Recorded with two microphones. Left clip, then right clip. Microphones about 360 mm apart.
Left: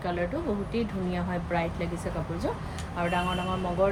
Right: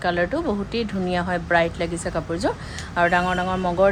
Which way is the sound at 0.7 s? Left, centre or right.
Right.